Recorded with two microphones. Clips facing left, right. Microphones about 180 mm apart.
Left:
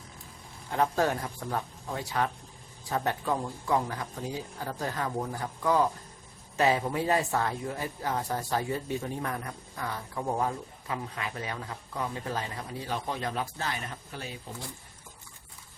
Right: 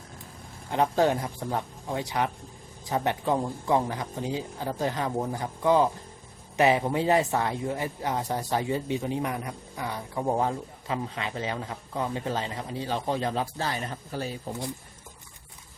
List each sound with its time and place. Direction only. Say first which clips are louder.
0.7 s a man's voice: right 3 dB; 20° right (ahead or behind); by 14.3 s 35° right (ahead or behind)